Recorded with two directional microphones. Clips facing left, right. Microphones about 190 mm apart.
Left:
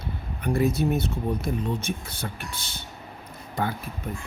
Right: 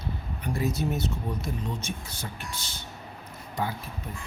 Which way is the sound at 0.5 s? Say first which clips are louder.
Left 6 dB; 60° left (ahead or behind).